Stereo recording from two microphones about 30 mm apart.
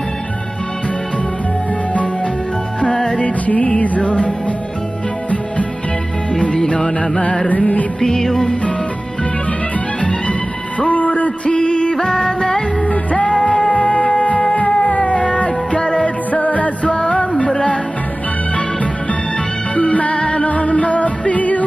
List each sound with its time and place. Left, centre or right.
2.9 s music: left
3.4 s music: left
7.4 s music: left
8.0 s music: centre
10.9 s a sound: left
11.5 s music: left
12.1 s music: centre
12.8 s music: left
14.9 s music: left
16.3 s music: left
16.8 s music: left
19.7 s music: left
20.2 s music: left
20.4 s music: left